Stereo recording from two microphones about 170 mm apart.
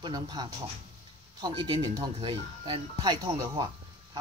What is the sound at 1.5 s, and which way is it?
Speech, 30° right (ahead or behind).